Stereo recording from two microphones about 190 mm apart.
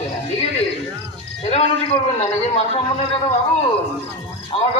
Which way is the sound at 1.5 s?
35° left (ahead or behind).